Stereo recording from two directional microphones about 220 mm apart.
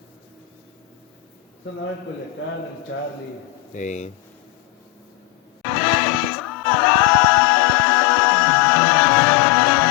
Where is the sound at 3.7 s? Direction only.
35° left (ahead or behind).